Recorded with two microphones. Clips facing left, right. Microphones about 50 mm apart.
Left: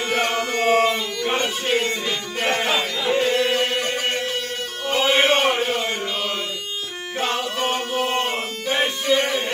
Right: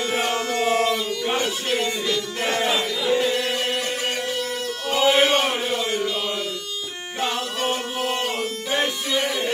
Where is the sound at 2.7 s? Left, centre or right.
Centre.